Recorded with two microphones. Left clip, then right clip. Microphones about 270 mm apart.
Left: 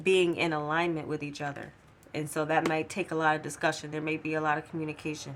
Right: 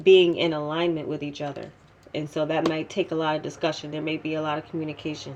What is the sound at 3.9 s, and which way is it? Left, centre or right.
Speech, left.